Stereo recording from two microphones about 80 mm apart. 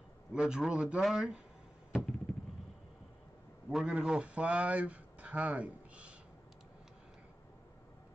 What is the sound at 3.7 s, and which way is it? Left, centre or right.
Speech, centre.